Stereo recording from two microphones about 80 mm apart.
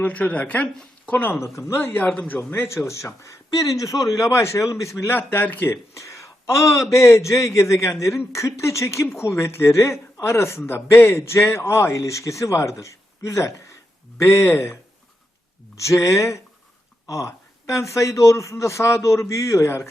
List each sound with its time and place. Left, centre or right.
0.0 s speech: centre
1.5 s speech: left
5.1 s speech: left